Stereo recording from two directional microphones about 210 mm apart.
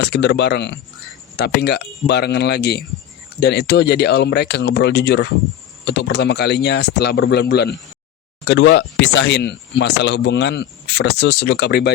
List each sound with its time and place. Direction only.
0.0 s speech: 55° left (ahead or behind)